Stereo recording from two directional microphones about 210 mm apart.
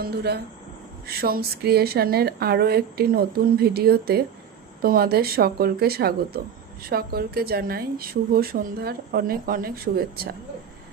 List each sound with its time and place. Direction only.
0.0 s a woman's voice: 50° right (ahead or behind)